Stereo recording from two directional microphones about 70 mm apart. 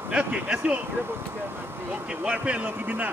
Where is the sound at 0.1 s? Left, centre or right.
Centre.